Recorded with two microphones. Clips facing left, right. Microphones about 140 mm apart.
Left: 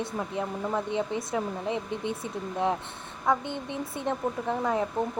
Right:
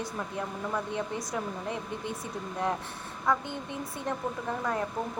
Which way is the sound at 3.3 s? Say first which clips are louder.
Left 2 dB; 25° left (ahead or behind).